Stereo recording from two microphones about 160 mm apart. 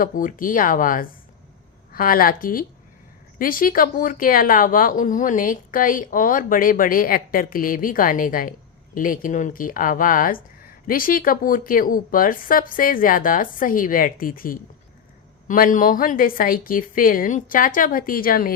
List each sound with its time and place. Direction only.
0.0 s speech: 55° left (ahead or behind)